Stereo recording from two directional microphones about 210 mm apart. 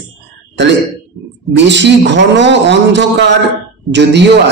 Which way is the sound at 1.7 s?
55° right (ahead or behind).